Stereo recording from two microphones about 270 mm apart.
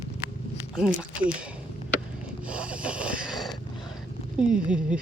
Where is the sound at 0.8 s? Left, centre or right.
Centre.